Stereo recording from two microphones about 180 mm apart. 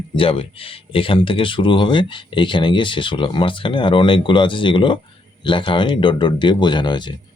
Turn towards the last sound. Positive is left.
turn(degrees=25)  # may be behind; listen again after turning